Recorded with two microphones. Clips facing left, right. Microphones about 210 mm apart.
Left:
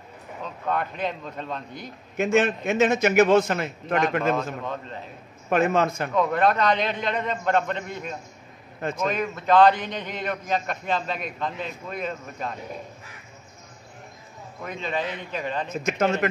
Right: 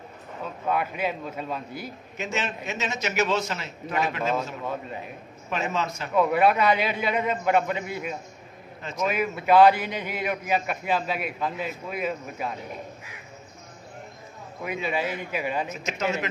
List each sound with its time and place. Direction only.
0.7 s a man's voice: 5° right (ahead or behind)
2.1 s a man's voice: 55° left (ahead or behind)
4.6 s a man's voice: 10° right (ahead or behind)
5.5 s a man's voice: 55° left (ahead or behind)
6.1 s a man's voice: 10° right (ahead or behind)
14.6 s a man's voice: 10° right (ahead or behind)
15.7 s a man's voice: 55° left (ahead or behind)